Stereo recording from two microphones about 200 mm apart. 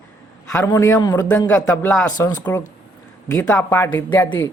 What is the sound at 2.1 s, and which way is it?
Speech, 20° left (ahead or behind).